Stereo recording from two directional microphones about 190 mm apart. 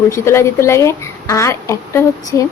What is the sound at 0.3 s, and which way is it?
A woman's voice, 15° left (ahead or behind).